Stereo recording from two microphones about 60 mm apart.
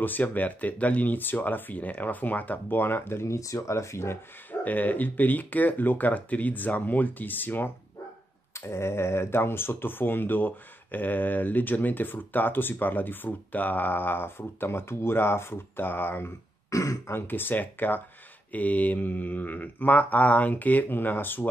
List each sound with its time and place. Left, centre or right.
0.0 s speech: left
3.3 s speech: left
4.5 s speech: left
8.5 s speech: left
16.7 s throat clearing: left
17.1 s speech: left